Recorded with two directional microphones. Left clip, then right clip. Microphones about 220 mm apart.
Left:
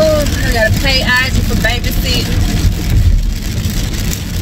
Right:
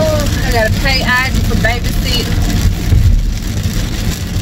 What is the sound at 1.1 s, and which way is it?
Speech, 25° left (ahead or behind).